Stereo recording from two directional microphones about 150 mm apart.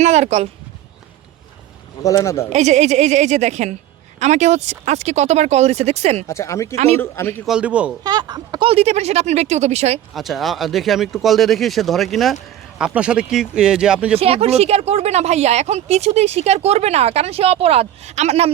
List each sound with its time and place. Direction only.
0.0 s speech: 45° right (ahead or behind)
2.0 s speech: 20° left (ahead or behind)
2.5 s speech: 50° right (ahead or behind)
6.2 s a man's voice: 20° left (ahead or behind)
7.4 s speech: 5° right (ahead or behind)
8.0 s speech: 30° right (ahead or behind); by 10.0 s 45° right (ahead or behind)
10.2 s speech: centre (ahead or behind)
14.2 s speech: 40° right (ahead or behind)